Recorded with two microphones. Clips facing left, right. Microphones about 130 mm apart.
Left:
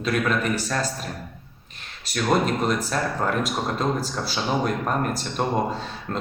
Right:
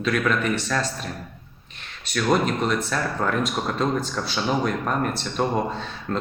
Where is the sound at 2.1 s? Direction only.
40° left (ahead or behind).